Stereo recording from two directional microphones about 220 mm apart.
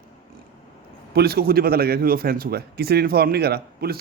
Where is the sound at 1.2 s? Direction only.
45° right (ahead or behind).